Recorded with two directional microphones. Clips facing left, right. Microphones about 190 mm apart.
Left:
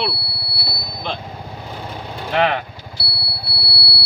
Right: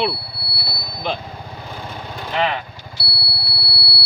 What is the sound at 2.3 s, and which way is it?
Speech, 55° left (ahead or behind).